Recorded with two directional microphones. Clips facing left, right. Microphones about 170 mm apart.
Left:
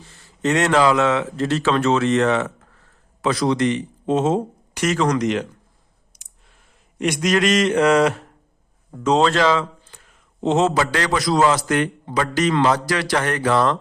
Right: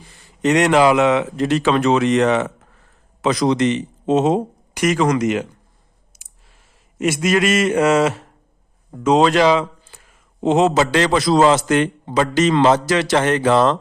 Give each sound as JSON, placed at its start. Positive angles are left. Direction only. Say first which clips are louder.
{"t": 0.0, "sound": "speech", "louder": "right 3 dB", "side_deg": -15}
{"t": 6.1, "sound": "clicking", "louder": "right 2 dB", "side_deg": -5}
{"t": 7.0, "sound": "speech", "louder": "right 2 dB", "side_deg": -5}